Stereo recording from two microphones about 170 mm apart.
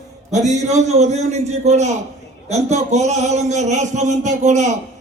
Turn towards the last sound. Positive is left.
turn(degrees=-45)  # may be behind; listen again after turning